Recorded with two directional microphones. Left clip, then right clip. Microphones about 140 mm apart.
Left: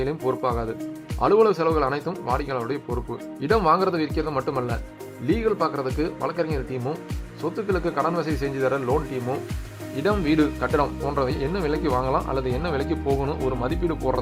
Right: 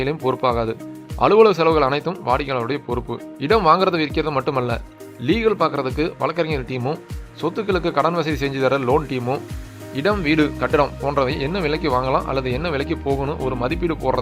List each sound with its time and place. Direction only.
0.0 s speech: 15° right (ahead or behind)
9.9 s speech: 10° right (ahead or behind)